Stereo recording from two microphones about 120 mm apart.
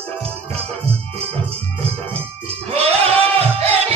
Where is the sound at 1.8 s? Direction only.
55° right (ahead or behind).